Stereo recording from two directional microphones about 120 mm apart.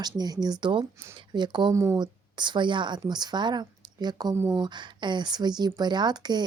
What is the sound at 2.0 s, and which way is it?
A woman's voice, 40° right (ahead or behind).